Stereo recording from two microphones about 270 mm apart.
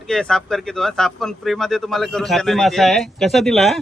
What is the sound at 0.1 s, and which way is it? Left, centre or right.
A man's voice, centre.